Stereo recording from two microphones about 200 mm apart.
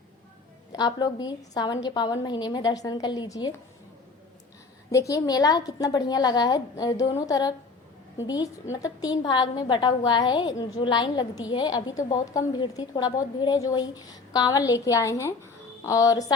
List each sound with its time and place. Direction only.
0.7 s a woman's voice: 20° left (ahead or behind)
4.9 s a woman's voice: 15° left (ahead or behind)
8.7 s a woman's voice: 20° left (ahead or behind)